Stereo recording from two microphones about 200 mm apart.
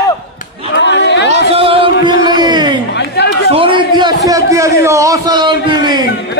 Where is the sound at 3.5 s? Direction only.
25° right (ahead or behind).